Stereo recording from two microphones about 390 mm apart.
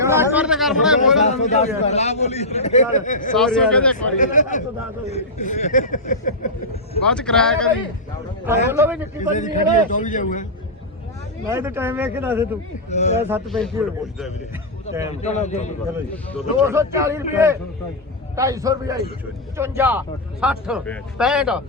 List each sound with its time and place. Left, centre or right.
0.0 s chatter: centre
1.2 s a man's voice: centre
3.3 s a man's voice: centre
4.2 s speech: centre
7.1 s a man's voice: centre
9.3 s speech: centre
11.4 s a man's voice: centre
12.9 s a man's voice: centre
13.2 s a man's voice: centre
15.1 s a man's voice: centre
16.1 s a man's voice: centre
16.6 s a man's voice: centre